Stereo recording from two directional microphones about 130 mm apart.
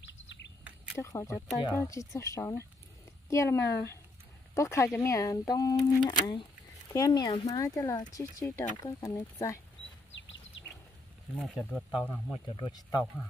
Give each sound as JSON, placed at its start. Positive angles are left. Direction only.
{"t": 0.9, "sound": "speech", "side_deg": 20}
{"t": 11.3, "sound": "speech", "side_deg": 5}
{"t": 12.1, "sound": "speech", "side_deg": 25}